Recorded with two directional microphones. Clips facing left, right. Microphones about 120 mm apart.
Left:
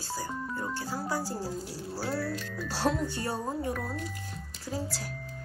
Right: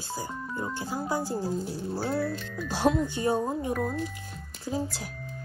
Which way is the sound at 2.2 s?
Centre (ahead or behind).